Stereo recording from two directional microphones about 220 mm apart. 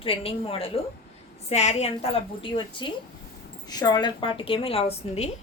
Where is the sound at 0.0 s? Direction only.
25° left (ahead or behind).